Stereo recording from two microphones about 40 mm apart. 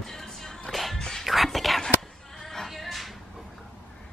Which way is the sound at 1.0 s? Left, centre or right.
Centre.